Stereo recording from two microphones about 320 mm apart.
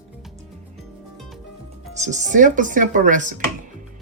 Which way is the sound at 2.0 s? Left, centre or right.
Right.